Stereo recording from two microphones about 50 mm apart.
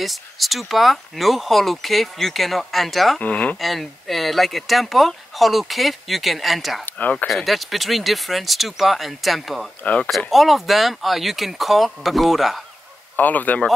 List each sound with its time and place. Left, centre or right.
0.0 s speech: centre
3.2 s speech: left
3.5 s speech: centre
6.9 s speech: left
7.4 s speech: centre
13.1 s speech: left